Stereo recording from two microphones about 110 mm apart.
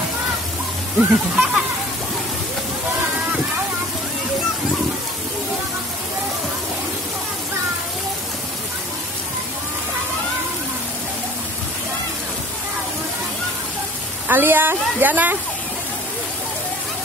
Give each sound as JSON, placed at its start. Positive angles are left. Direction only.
{"t": 0.9, "sound": "speech", "side_deg": -5}
{"t": 14.2, "sound": "a woman's voice", "side_deg": -20}